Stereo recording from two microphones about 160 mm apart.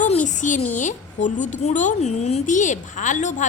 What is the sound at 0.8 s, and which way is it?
Speech, 50° left (ahead or behind).